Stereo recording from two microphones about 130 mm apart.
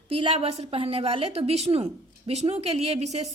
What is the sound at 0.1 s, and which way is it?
A woman's voice, 45° right (ahead or behind).